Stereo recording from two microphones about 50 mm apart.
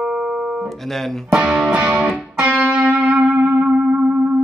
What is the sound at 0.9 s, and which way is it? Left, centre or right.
Music, centre.